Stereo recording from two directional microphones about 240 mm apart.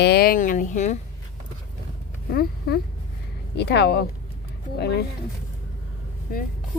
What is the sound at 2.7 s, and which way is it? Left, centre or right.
Speech, left.